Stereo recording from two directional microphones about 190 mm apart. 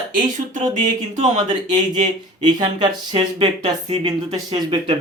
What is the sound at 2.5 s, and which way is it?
Speech, 20° right (ahead or behind).